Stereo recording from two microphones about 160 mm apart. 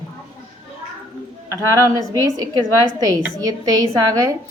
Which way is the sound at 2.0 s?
20° right (ahead or behind).